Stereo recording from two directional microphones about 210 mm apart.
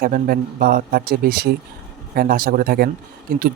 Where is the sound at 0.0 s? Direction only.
45° right (ahead or behind).